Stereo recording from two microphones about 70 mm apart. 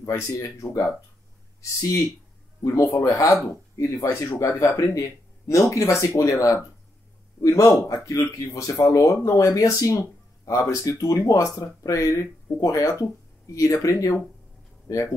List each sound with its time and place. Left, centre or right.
0.3 s speech: left